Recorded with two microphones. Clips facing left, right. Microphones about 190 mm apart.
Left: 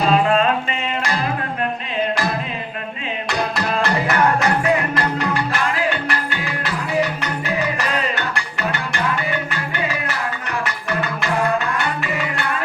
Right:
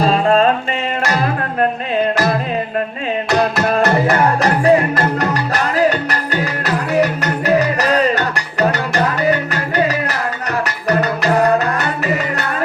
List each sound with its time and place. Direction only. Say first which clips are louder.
0.1 s music: right 1 dB; 35° right (ahead or behind)
3.6 s music: right 6 dB; 45° right (ahead or behind)